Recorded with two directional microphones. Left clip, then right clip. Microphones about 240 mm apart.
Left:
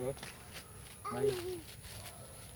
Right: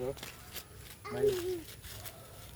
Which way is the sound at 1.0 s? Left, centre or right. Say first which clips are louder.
Right 3 dB; right.